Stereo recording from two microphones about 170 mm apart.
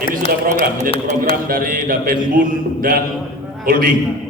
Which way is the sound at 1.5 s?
55° right (ahead or behind).